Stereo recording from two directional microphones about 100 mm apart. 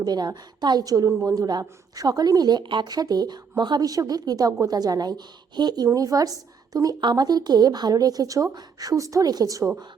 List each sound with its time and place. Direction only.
0.0 s a woman's voice: 45° right (ahead or behind)